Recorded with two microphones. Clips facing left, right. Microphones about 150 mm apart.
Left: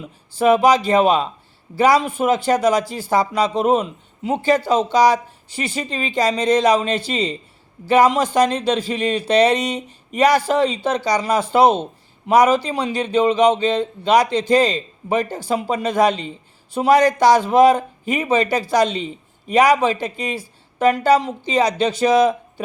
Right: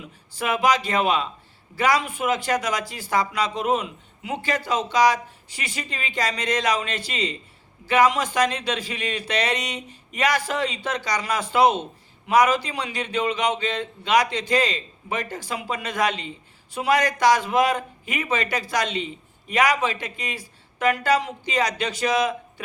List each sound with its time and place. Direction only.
0.3 s a man's voice: 30° left (ahead or behind)